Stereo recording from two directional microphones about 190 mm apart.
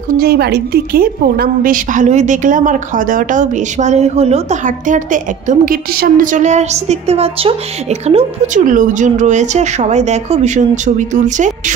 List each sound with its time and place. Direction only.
0.1 s a woman's voice: 55° right (ahead or behind)